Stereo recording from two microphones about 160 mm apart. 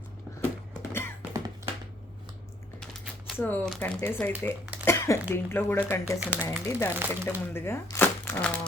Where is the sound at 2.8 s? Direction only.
Centre (ahead or behind).